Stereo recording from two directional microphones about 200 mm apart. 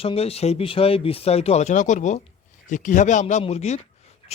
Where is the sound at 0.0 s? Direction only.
30° left (ahead or behind).